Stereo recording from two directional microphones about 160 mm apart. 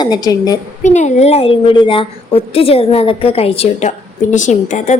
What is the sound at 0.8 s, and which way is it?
Speech, 50° left (ahead or behind).